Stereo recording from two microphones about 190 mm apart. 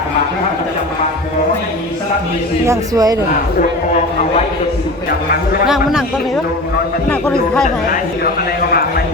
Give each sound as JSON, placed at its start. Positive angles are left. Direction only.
{"t": 2.6, "sound": "speech", "side_deg": -20}
{"t": 5.6, "sound": "a man's voice", "side_deg": 0}